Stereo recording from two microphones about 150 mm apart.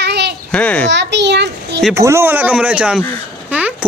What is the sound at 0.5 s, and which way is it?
Speech, 5° left (ahead or behind).